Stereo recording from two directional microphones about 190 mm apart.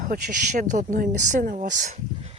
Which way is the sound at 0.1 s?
40° right (ahead or behind).